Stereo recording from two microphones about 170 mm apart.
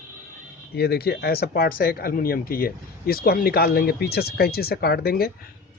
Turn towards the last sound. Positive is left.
turn(degrees=65)  # may be behind; listen again after turning